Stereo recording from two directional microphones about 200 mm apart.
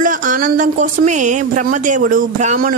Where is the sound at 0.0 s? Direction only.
40° right (ahead or behind).